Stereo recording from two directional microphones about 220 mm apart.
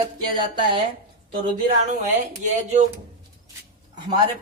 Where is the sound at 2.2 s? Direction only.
30° right (ahead or behind).